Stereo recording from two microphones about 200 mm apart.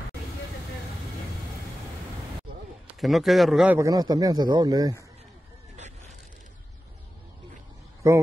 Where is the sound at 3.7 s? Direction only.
15° right (ahead or behind).